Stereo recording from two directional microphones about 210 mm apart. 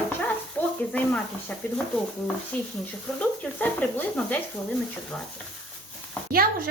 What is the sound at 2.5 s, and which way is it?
Speech, 5° left (ahead or behind).